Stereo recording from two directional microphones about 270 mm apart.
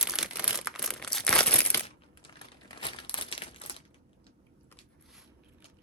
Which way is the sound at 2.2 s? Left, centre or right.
Centre.